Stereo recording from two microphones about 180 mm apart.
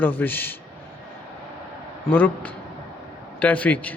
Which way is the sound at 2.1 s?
10° left (ahead or behind).